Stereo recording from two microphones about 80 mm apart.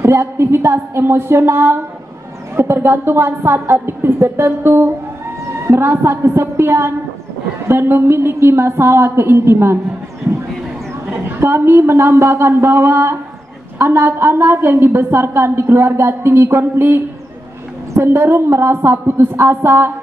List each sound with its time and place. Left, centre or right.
0.0 s a woman's voice: right
11.1 s a woman's voice: right